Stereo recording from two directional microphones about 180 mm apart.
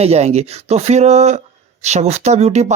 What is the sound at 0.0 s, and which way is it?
Speech, 35° right (ahead or behind).